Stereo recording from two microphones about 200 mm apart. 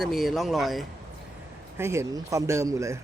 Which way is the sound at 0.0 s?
Centre (ahead or behind).